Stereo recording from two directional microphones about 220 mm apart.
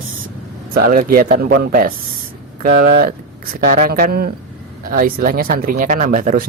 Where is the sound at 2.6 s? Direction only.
45° right (ahead or behind).